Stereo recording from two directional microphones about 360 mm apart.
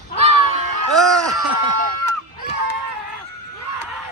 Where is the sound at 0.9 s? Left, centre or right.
Centre.